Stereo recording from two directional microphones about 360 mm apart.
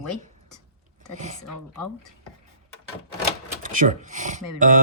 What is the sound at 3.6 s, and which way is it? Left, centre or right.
Speech, right.